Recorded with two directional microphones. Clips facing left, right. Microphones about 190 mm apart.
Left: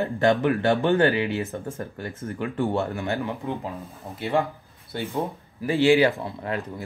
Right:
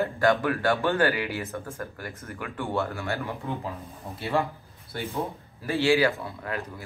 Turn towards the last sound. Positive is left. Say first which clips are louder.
# left 4 dB
turn(degrees=25)  # may be behind; listen again after turning